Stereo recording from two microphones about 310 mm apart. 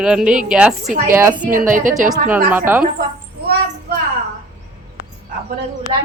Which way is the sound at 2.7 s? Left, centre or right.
Centre.